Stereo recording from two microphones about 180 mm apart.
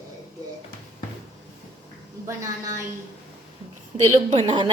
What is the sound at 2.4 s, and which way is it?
Speech, 15° right (ahead or behind).